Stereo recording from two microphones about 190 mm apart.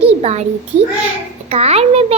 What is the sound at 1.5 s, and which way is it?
Speech, 35° right (ahead or behind).